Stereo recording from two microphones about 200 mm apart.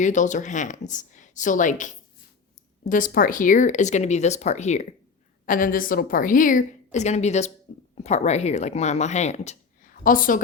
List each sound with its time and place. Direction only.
0.0 s speech: 40° left (ahead or behind)
2.9 s a woman's voice: 45° left (ahead or behind)